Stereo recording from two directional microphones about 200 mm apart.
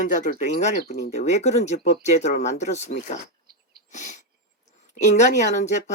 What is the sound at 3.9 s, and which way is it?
Sneeze, 35° left (ahead or behind).